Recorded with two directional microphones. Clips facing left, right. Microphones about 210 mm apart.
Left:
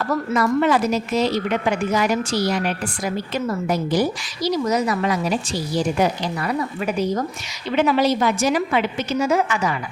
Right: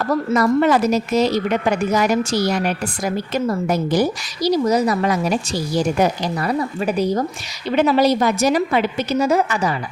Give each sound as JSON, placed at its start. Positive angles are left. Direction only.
{"t": 0.0, "sound": "a woman's voice", "side_deg": -35}